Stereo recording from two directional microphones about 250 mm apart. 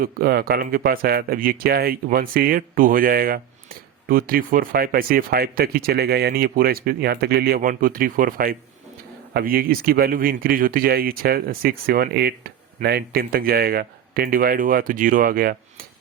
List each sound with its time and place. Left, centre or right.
0.0 s speech: right